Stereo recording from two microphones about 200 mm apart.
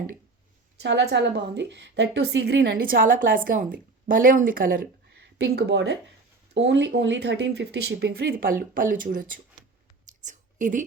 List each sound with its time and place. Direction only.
0.8 s a woman's voice: 60° right (ahead or behind)
5.5 s speech: 55° right (ahead or behind)
10.1 s whispering: 40° right (ahead or behind)